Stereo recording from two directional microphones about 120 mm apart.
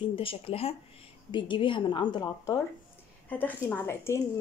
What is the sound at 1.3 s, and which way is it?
Speech, 40° left (ahead or behind).